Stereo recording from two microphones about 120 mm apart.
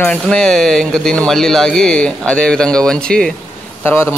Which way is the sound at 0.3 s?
5° left (ahead or behind).